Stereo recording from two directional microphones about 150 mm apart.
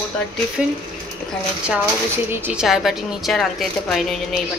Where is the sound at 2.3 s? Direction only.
10° right (ahead or behind).